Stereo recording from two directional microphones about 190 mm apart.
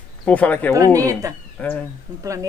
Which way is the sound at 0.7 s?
15° right (ahead or behind).